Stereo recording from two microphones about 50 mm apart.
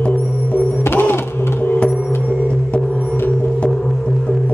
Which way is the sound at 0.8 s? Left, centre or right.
Left.